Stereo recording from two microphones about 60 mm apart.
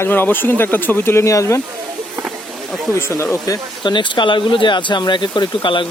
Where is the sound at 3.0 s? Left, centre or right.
Left.